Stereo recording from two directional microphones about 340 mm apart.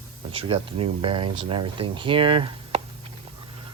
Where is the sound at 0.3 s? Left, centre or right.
Centre.